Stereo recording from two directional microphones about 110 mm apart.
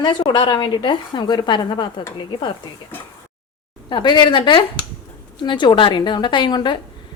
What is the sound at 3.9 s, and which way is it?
Speech, 45° left (ahead or behind).